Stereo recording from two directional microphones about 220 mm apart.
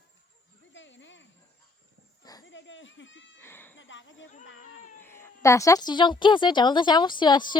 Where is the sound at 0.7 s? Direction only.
55° left (ahead or behind).